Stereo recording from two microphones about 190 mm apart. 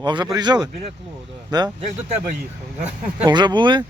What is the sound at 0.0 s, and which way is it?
Speech, 25° right (ahead or behind).